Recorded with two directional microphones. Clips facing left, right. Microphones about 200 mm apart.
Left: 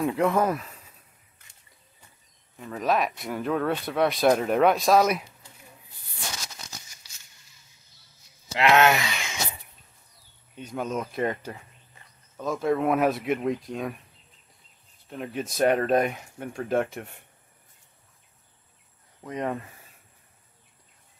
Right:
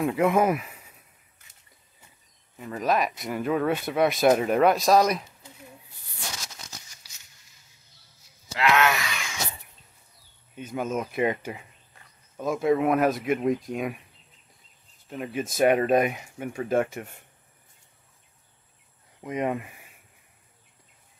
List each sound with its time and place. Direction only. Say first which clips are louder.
0.0 s speech: right 1 dB; 5° right (ahead or behind)
2.5 s speech: even; centre (ahead or behind)
8.5 s speech: left 3 dB; 25° left (ahead or behind)
10.5 s speech: right 1 dB; 5° right (ahead or behind)
15.0 s speech: right 1 dB; 5° right (ahead or behind)
19.2 s speech: right 2 dB; 15° right (ahead or behind)